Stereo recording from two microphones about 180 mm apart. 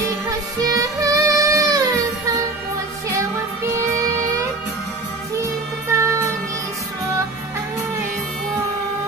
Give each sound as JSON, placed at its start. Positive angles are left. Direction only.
{"t": 0.3, "sound": "child singing", "side_deg": -20}
{"t": 5.9, "sound": "music", "side_deg": -15}